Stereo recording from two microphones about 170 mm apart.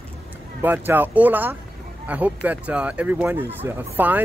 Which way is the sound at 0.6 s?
10° right (ahead or behind).